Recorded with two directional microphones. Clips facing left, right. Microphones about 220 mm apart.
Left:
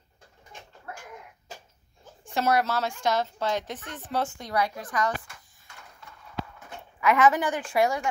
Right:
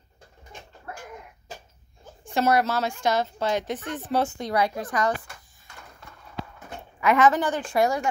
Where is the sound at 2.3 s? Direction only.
Centre (ahead or behind).